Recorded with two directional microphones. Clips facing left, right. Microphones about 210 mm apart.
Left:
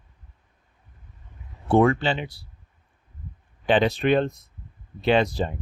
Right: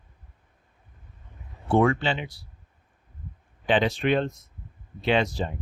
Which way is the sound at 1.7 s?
35° left (ahead or behind).